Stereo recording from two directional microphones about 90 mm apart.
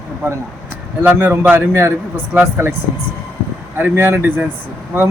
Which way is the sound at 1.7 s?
30° right (ahead or behind).